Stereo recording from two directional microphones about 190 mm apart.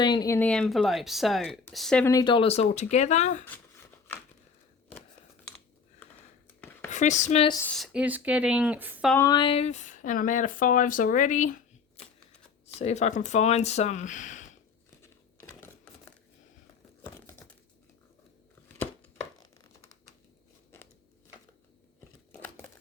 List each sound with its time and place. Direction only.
0.0 s speech: 20° left (ahead or behind)
0.3 s speech: 5° left (ahead or behind)
2.0 s speech: 20° left (ahead or behind); by 3.4 s 40° left (ahead or behind)
3.5 s a sound: 10° left (ahead or behind)
6.9 s speech: 40° left (ahead or behind)
7.6 s speech: centre (ahead or behind)
9.1 s speech: 20° left (ahead or behind); by 14.5 s 40° left (ahead or behind)
15.0 s crumpling: 15° left (ahead or behind)
22.3 s crumpling: 10° left (ahead or behind)